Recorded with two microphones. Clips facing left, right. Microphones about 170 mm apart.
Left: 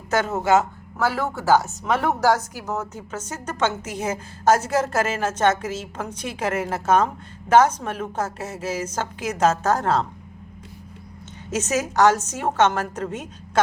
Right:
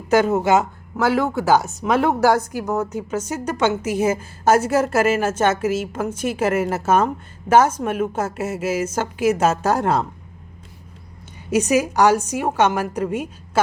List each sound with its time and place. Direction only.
0.1 s a woman's voice: 15° right (ahead or behind)
11.5 s a woman's voice: 10° right (ahead or behind)